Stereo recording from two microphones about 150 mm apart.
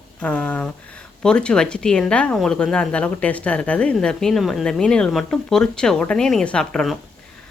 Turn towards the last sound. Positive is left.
turn(degrees=5)  # may be behind; listen again after turning